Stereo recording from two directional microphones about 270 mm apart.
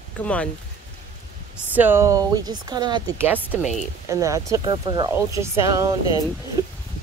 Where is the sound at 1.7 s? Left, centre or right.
Centre.